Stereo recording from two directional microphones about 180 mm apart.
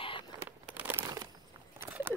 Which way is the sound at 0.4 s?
10° right (ahead or behind).